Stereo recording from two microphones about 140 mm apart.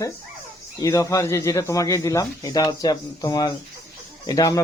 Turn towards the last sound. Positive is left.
turn(degrees=25)  # may be behind; listen again after turning